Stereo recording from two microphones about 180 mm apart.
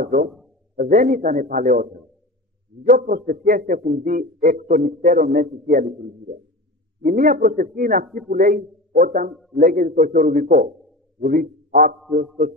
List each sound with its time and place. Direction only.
0.0 s a man's voice: 50° right (ahead or behind)
7.0 s a man's voice: 45° right (ahead or behind)